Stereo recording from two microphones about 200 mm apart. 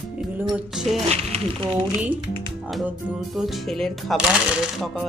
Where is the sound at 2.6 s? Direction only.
5° right (ahead or behind).